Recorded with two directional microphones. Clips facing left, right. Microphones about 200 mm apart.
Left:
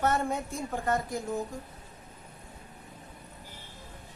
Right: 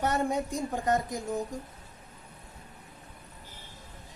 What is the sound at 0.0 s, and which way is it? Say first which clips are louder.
Speech: even; 15° right (ahead or behind).